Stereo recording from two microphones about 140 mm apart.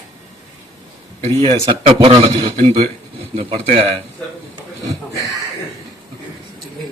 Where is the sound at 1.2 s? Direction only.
40° right (ahead or behind).